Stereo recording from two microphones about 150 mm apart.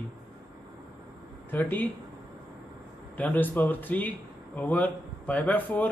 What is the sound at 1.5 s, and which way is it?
Speech, 10° left (ahead or behind).